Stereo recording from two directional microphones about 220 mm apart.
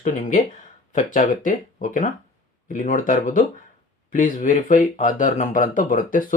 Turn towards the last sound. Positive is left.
turn(degrees=35)  # may be behind; listen again after turning